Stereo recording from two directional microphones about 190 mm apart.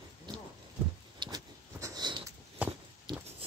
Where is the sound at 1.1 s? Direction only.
20° right (ahead or behind).